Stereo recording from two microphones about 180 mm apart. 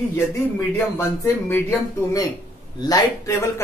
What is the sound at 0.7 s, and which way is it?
Speech, 15° left (ahead or behind).